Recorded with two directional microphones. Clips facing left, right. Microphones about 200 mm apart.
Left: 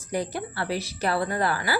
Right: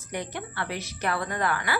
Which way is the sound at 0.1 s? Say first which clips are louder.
Left 5 dB; 35° left (ahead or behind).